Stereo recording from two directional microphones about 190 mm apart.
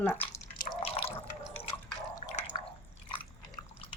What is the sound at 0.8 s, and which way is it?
Drip, 30° left (ahead or behind).